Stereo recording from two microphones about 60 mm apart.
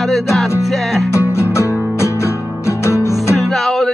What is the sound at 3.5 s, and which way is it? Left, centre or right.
Music, centre.